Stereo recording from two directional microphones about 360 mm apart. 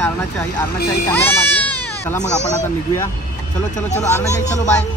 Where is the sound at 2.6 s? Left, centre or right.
Centre.